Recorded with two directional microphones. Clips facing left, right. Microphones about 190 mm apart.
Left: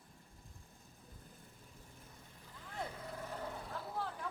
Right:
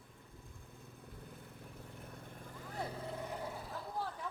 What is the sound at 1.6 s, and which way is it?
Vehicle, 60° right (ahead or behind).